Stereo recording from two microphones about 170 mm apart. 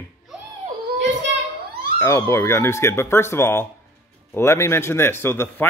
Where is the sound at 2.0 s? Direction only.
15° left (ahead or behind).